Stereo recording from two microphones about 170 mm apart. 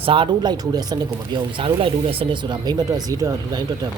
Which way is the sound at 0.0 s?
30° right (ahead or behind).